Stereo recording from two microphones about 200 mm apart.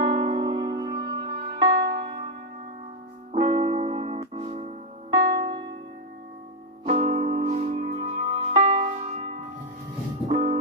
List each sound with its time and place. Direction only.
0.0 s music: 35° right (ahead or behind)
3.3 s music: 30° right (ahead or behind)
6.8 s music: 35° right (ahead or behind)